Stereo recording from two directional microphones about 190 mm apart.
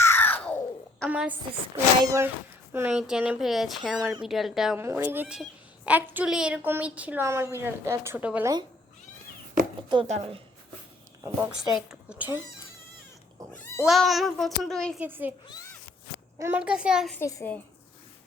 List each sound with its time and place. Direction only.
0.0 s a sound: 10° left (ahead or behind)
1.1 s a woman's voice: 10° right (ahead or behind)
9.9 s speech: 25° right (ahead or behind)
11.2 s a woman's voice: 15° right (ahead or behind)
11.9 s speech: 5° right (ahead or behind)
13.5 s speech: 10° left (ahead or behind)
15.0 s a woman's voice: 10° right (ahead or behind)
16.4 s speech: 10° right (ahead or behind)
17.2 s a child's voice: 15° left (ahead or behind)